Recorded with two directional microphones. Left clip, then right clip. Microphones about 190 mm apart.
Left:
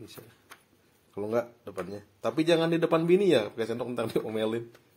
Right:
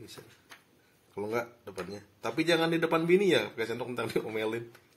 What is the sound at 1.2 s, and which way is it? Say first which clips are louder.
Speech: left 3 dB; 50° left (ahead or behind).